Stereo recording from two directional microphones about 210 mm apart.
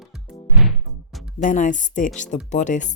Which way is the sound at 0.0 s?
Centre (ahead or behind).